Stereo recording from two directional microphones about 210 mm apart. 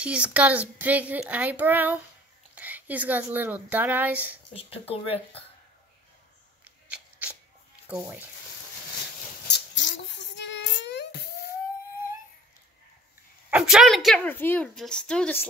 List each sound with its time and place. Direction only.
0.0 s a woman's voice: 5° right (ahead or behind)
4.6 s speech: 25° left (ahead or behind)
6.6 s a sound: 5° right (ahead or behind)
7.9 s speech: 10° right (ahead or behind)
9.5 s a sound: 60° left (ahead or behind)
13.5 s a woman's voice: 5° right (ahead or behind)